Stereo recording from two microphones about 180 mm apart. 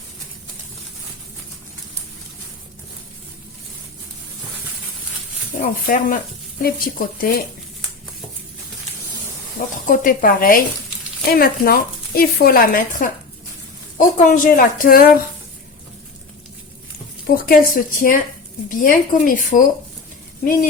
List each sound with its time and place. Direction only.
5.6 s speech: 50° left (ahead or behind)
9.6 s speech: 50° left (ahead or behind)
17.2 s speech: 55° left (ahead or behind)